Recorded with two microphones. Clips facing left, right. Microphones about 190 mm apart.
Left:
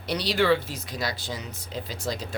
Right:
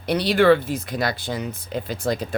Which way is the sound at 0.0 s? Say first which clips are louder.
Right 7 dB; 55° right (ahead or behind).